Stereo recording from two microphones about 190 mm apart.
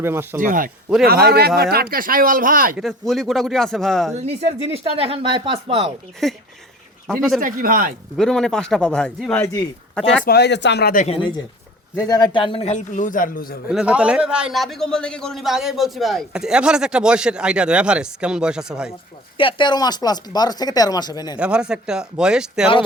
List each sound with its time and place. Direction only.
0.0 s speech: 10° right (ahead or behind)
0.3 s a man's voice: 45° right (ahead or behind)
2.7 s a man's voice: centre (ahead or behind)
4.2 s speech: 35° right (ahead or behind)
6.2 s a man's voice: centre (ahead or behind)
7.3 s speech: 45° right (ahead or behind)
8.1 s a man's voice: 5° left (ahead or behind)
9.9 s speech: 5° left (ahead or behind)
10.2 s speech: 60° left (ahead or behind)
10.9 s a man's voice: 35° left (ahead or behind); by 13.6 s 50° left (ahead or behind)
13.7 s a man's voice: 5° right (ahead or behind)
19.4 s speech: 25° left (ahead or behind)
21.3 s a man's voice: 5° right (ahead or behind)